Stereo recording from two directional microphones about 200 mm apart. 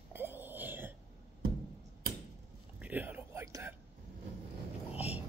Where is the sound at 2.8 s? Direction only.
10° right (ahead or behind).